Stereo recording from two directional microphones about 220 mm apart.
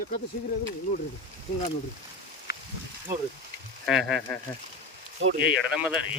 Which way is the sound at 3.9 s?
Centre (ahead or behind).